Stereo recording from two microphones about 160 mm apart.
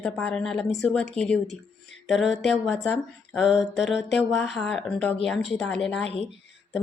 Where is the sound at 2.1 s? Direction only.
Centre (ahead or behind).